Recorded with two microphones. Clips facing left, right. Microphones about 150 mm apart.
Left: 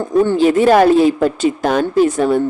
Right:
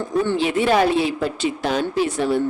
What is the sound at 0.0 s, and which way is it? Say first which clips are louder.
Speech: left 8 dB; 45° left (ahead or behind).